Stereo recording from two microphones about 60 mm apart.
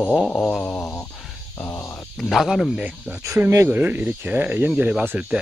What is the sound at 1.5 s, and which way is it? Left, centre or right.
Speech, left.